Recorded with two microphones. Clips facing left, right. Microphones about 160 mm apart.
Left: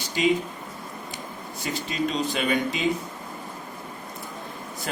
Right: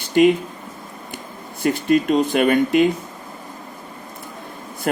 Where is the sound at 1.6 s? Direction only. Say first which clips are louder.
Right 11 dB; 55° right (ahead or behind).